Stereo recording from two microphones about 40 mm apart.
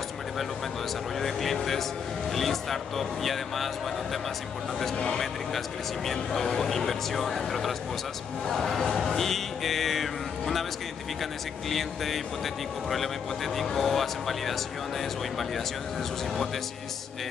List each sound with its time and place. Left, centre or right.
1.2 s speech: centre
11.7 s speech: centre
13.6 s speech: centre